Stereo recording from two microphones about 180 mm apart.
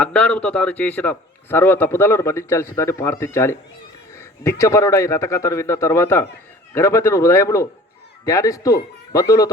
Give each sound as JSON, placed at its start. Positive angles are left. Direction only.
{"t": 0.0, "sound": "a man's voice", "side_deg": 5}